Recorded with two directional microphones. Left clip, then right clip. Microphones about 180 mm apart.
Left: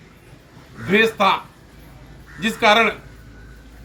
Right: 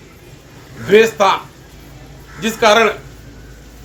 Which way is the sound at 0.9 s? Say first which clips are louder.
Right 5 dB; 20° right (ahead or behind).